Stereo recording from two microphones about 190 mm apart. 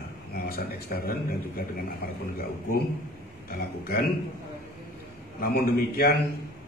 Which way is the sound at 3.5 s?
55° left (ahead or behind).